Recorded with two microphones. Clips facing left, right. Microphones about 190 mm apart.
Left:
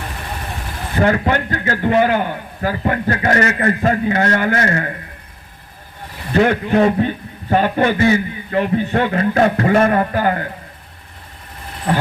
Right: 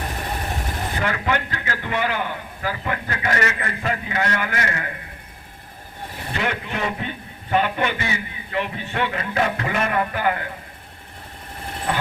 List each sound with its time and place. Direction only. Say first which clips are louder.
0.9 s a man's voice: left 9 dB; 40° left (ahead or behind)
6.3 s a man's voice: left 13 dB; 40° left (ahead or behind)